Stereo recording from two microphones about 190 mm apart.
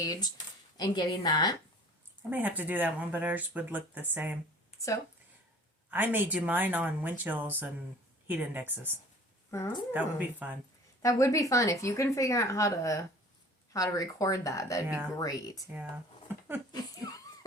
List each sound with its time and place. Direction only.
0.0 s speech: 20° left (ahead or behind)
2.3 s speech: 10° right (ahead or behind)
4.7 s a sound: 35° left (ahead or behind)
5.9 s speech: 10° right (ahead or behind)
9.5 s a woman's voice: 15° left (ahead or behind)
9.9 s speech: 10° right (ahead or behind)
11.0 s a woman's voice: 15° left (ahead or behind)
16.3 s a sound: 10° right (ahead or behind)
16.7 s laughter: 20° left (ahead or behind)